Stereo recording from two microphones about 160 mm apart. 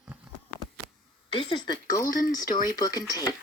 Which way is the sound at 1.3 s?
35° left (ahead or behind).